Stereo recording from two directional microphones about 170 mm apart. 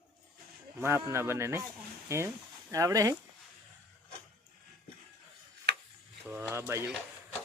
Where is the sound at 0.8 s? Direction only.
15° right (ahead or behind).